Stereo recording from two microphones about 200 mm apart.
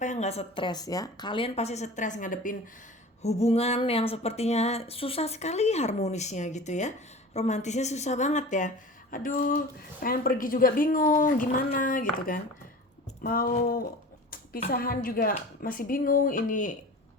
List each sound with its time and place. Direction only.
0.0 s speech: 35° left (ahead or behind)